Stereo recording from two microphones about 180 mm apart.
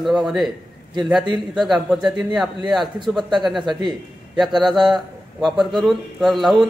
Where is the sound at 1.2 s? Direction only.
25° right (ahead or behind).